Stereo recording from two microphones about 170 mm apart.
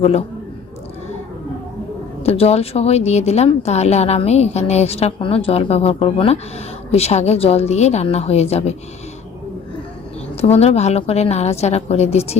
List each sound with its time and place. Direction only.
0.0 s speech: 40° left (ahead or behind)
2.2 s speech: 35° left (ahead or behind)
10.4 s speech: 40° left (ahead or behind)